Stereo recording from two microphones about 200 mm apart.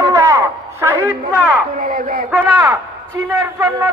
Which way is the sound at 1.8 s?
45° right (ahead or behind).